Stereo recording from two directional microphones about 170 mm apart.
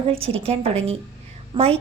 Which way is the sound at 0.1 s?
35° right (ahead or behind).